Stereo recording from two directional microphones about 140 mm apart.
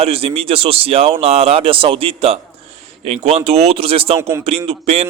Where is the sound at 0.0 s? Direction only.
40° right (ahead or behind).